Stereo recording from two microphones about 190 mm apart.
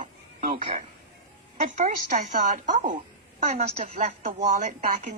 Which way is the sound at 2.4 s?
40° right (ahead or behind).